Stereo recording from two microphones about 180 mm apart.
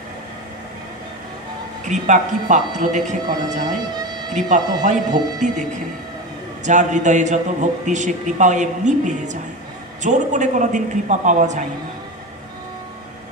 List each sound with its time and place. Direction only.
1.9 s a man's voice: 45° right (ahead or behind)